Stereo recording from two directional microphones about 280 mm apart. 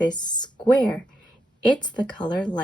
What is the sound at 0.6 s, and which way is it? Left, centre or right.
Speech, centre.